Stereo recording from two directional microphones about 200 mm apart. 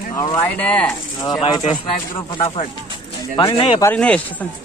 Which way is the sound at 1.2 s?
20° left (ahead or behind).